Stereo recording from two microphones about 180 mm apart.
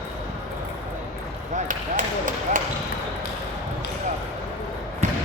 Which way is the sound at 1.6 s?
45° right (ahead or behind).